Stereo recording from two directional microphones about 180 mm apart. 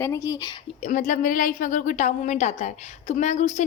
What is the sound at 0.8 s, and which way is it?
A woman's voice, 45° left (ahead or behind).